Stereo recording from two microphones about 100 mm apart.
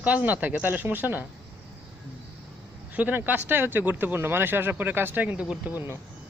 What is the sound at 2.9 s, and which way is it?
A man's voice, 15° right (ahead or behind).